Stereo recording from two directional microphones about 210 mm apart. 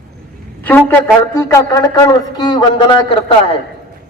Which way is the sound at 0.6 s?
10° left (ahead or behind).